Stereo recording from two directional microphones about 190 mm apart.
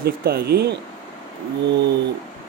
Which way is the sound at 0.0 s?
55° right (ahead or behind).